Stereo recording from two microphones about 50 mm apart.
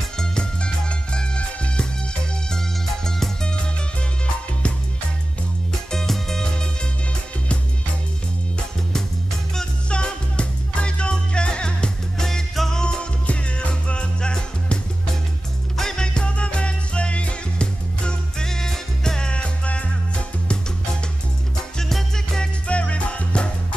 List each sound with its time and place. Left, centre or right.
0.2 s music: centre
3.1 s music: centre
5.7 s music: centre
9.8 s music: left
12.3 s music: centre
12.8 s music: left
15.8 s music: centre
21.7 s music: centre
22.7 s music: left